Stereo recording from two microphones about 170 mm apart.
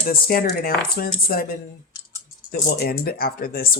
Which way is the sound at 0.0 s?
60° left (ahead or behind).